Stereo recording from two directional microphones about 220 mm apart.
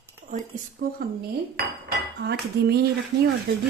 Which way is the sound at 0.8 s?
45° right (ahead or behind).